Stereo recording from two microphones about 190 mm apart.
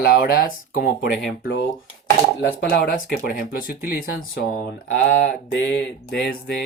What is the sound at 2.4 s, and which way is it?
Speech, 60° left (ahead or behind).